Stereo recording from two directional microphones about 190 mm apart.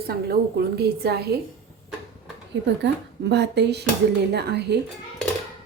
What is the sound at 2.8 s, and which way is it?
A woman's voice, 65° right (ahead or behind).